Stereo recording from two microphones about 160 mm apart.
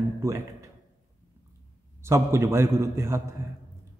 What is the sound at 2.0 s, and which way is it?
A man's voice, 15° right (ahead or behind).